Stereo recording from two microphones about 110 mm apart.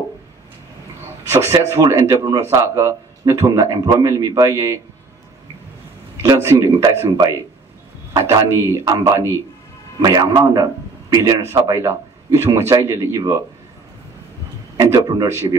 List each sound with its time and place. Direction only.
1.2 s speech: 25° right (ahead or behind)
6.2 s a man's voice: 35° right (ahead or behind)
11.8 s speech: 25° right (ahead or behind)
14.8 s a man's voice: 35° right (ahead or behind)